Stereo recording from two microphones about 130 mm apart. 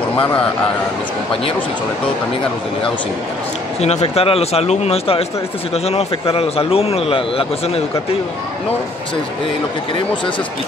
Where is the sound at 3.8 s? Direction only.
55° left (ahead or behind).